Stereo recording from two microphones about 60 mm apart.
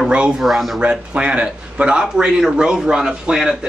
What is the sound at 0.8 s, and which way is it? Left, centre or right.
A man's voice, centre.